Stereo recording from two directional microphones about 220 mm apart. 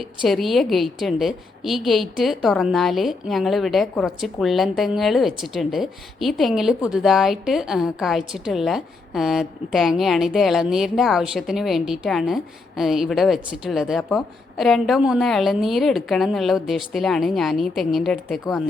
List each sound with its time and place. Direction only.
0.0 s a woman's voice: centre (ahead or behind)